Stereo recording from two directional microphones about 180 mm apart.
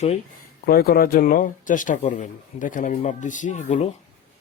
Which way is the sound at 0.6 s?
55° left (ahead or behind).